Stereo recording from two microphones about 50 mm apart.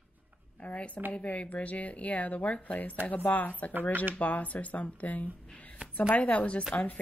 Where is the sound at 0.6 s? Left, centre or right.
Left.